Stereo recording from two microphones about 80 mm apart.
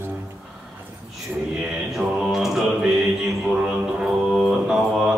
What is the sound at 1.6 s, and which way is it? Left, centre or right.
Music, centre.